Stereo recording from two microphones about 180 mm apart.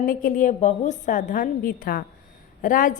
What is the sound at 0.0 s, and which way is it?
A woman's voice, 50° left (ahead or behind).